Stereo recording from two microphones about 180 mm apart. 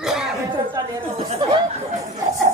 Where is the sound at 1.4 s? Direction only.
25° right (ahead or behind).